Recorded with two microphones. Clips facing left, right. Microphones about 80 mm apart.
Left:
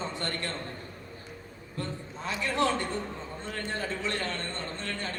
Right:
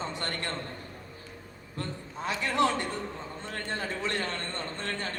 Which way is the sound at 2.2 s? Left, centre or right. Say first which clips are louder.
Right 1 dB; right.